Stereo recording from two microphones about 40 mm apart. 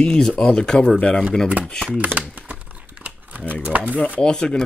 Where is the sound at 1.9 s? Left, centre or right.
Right.